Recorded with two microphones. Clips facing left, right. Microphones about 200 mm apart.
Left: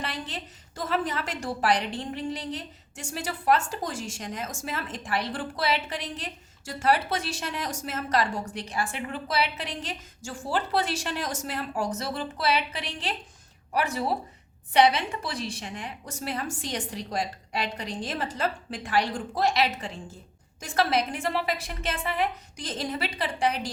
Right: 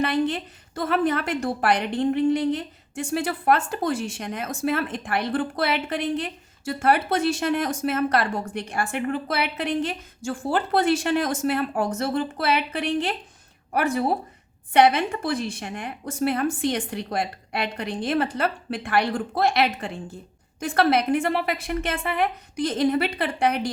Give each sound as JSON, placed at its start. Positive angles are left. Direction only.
{"t": 0.0, "sound": "a woman's voice", "side_deg": -60}